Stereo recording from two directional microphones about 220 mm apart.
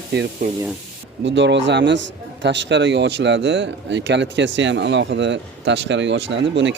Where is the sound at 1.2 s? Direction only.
55° right (ahead or behind).